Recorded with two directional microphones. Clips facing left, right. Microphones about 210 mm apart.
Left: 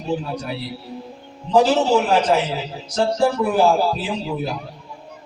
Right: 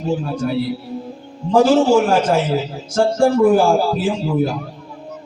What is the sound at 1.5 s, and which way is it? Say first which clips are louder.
A man's voice: right 4 dB; 50° right (ahead or behind).